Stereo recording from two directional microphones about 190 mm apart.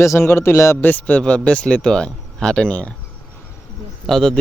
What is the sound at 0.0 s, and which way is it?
A man's voice, 15° left (ahead or behind).